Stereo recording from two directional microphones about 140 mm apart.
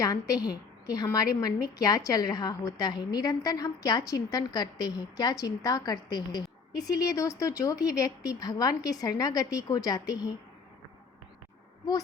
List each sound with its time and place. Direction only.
0.0 s a woman's voice: 25° left (ahead or behind)